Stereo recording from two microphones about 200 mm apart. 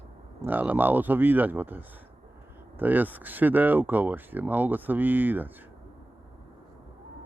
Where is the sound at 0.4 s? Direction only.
10° right (ahead or behind).